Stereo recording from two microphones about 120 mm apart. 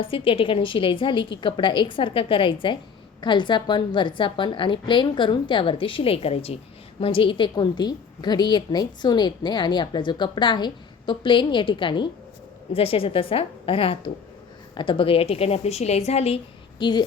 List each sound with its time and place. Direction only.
0.0 s a woman's voice: 50° left (ahead or behind)
12.7 s a woman's voice: 50° left (ahead or behind)
16.7 s a woman's voice: 40° left (ahead or behind)